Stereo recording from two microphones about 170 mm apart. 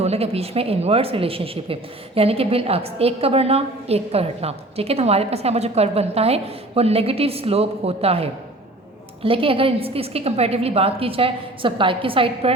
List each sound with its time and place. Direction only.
0.0 s a woman's voice: 35° right (ahead or behind)